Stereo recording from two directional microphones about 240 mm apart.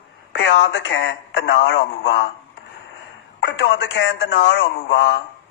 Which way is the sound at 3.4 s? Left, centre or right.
Left.